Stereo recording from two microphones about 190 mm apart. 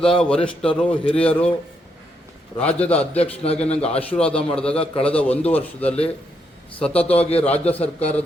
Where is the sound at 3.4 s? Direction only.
30° left (ahead or behind).